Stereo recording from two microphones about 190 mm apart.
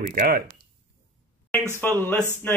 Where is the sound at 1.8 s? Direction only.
10° left (ahead or behind).